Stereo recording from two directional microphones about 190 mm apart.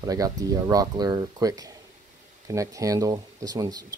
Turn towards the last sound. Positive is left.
turn(degrees=-20)  # may be behind; listen again after turning